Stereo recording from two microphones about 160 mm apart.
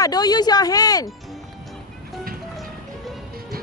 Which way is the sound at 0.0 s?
25° left (ahead or behind).